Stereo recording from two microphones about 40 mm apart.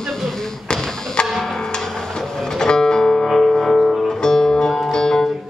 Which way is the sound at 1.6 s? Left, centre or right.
Centre.